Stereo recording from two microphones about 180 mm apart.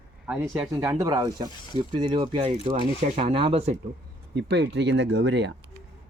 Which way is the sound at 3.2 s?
30° right (ahead or behind).